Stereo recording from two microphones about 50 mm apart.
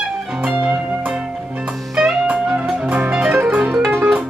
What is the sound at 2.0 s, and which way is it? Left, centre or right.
Music, centre.